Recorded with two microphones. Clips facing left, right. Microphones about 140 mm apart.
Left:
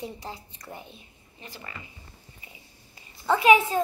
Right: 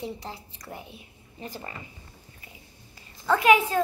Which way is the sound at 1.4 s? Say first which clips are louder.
Right 6 dB; 40° right (ahead or behind).